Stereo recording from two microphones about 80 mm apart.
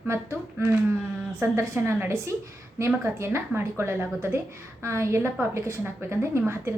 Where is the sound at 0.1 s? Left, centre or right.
Right.